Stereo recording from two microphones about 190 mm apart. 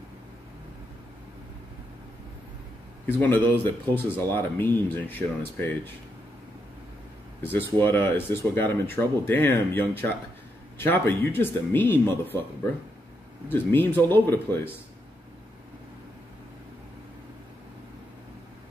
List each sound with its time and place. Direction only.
3.2 s speech: 10° left (ahead or behind)
7.8 s speech: 10° left (ahead or behind)
13.5 s speech: 10° left (ahead or behind)